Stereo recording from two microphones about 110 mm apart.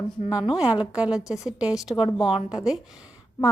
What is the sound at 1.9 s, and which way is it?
Speech, 55° left (ahead or behind).